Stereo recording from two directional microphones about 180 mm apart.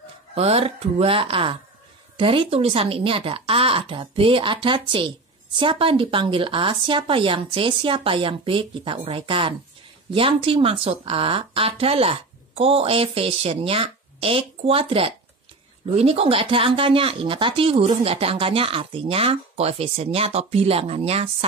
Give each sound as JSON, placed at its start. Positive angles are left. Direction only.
{"t": 0.3, "sound": "speech", "side_deg": -35}